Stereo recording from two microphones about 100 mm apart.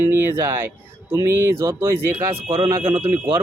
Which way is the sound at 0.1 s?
25° right (ahead or behind).